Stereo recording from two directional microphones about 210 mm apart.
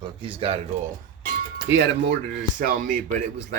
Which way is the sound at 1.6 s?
60° right (ahead or behind).